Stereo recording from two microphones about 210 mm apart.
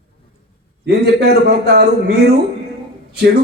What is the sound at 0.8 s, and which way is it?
A man's voice, 50° right (ahead or behind).